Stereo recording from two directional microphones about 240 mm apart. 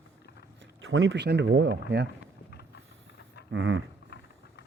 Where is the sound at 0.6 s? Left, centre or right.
Right.